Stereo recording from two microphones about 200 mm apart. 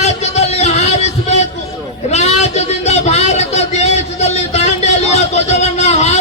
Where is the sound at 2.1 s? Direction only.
35° left (ahead or behind).